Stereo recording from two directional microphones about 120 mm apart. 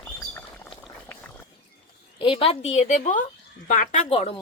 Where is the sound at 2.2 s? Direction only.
50° left (ahead or behind).